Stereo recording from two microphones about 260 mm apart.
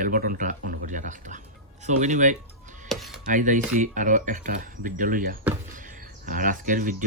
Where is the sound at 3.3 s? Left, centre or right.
Right.